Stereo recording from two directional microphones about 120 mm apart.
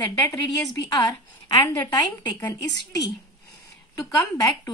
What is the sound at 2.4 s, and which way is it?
Speech, 35° left (ahead or behind).